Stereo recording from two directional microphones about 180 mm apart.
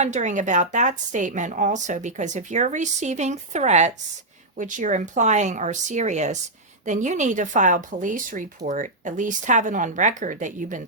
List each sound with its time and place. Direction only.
0.0 s a woman's voice: 40° right (ahead or behind)